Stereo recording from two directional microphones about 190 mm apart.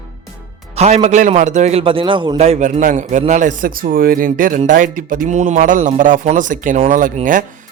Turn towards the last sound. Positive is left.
turn(degrees=-45)  # may be behind; listen again after turning